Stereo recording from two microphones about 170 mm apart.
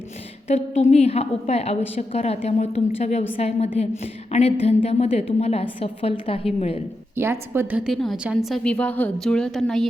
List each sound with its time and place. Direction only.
0.4 s a woman's voice: 40° left (ahead or behind)
7.2 s a woman's voice: 15° right (ahead or behind); by 9.8 s centre (ahead or behind)